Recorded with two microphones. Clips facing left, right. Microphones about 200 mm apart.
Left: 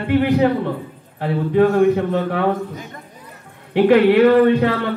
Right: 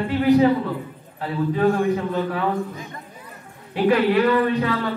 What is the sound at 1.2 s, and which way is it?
A man's voice, 70° left (ahead or behind).